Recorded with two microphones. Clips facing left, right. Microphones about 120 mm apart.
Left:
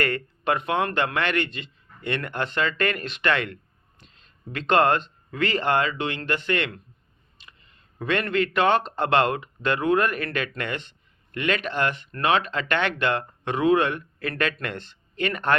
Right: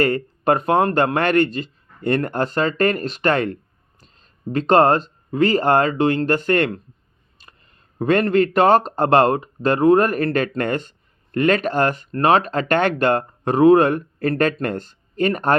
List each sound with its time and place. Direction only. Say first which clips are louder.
0.0 s speech: right 7 dB; 40° right (ahead or behind)